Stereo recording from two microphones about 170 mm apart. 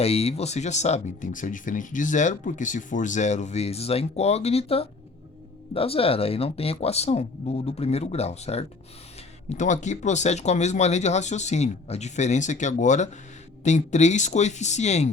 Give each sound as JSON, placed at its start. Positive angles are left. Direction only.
{"t": 0.0, "sound": "speech", "side_deg": 35}